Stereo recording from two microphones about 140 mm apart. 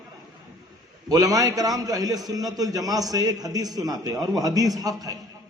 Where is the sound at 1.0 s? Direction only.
25° right (ahead or behind).